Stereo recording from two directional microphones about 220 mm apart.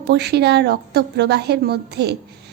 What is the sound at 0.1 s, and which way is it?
A woman's voice, 50° right (ahead or behind).